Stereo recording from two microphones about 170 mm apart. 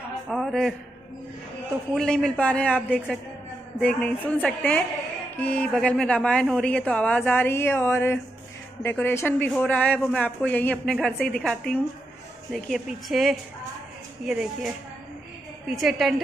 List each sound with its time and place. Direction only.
0.3 s a man's voice: centre (ahead or behind)
2.0 s a man's voice: centre (ahead or behind)
4.4 s a man's voice: 5° left (ahead or behind)
15.7 s a man's voice: centre (ahead or behind)